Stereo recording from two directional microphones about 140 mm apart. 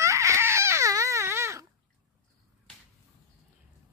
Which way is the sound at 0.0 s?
20° right (ahead or behind).